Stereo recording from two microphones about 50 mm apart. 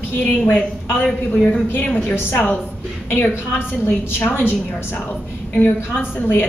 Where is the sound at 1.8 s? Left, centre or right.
Left.